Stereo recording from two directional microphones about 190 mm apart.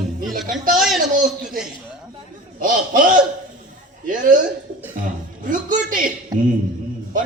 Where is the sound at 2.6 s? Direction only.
45° right (ahead or behind).